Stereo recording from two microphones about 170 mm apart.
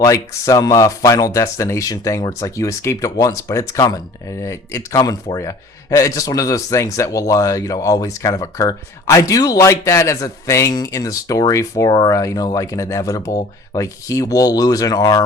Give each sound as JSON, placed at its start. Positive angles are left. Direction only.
{"t": 0.0, "sound": "speech", "side_deg": 20}